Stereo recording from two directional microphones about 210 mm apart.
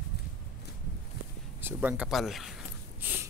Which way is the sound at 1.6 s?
10° right (ahead or behind).